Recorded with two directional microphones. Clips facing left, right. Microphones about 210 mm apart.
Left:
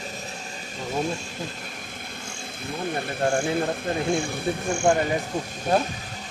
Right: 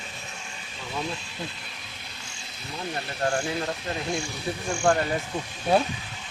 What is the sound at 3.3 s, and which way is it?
Speech, 50° left (ahead or behind).